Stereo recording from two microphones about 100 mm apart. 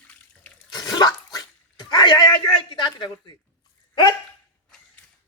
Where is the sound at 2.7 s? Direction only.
50° left (ahead or behind).